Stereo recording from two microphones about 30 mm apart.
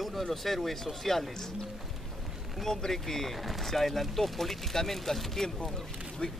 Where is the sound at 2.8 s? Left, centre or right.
Centre.